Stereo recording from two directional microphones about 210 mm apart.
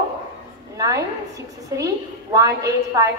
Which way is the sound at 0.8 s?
15° right (ahead or behind).